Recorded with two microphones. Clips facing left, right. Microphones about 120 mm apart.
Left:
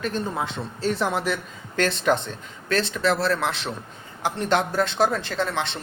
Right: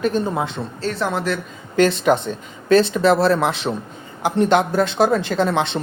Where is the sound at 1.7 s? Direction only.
5° right (ahead or behind).